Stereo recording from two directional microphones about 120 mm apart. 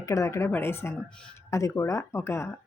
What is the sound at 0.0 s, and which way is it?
Speech, 25° left (ahead or behind).